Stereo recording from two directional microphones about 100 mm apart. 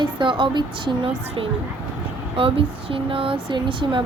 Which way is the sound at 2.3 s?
65° right (ahead or behind).